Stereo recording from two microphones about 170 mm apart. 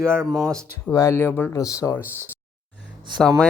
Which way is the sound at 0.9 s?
20° left (ahead or behind).